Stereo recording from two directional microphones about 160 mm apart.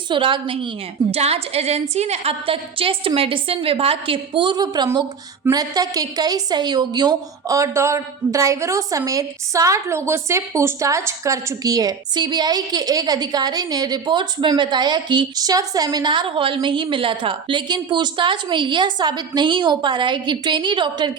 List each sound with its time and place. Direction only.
0.1 s a woman's voice: 30° right (ahead or behind)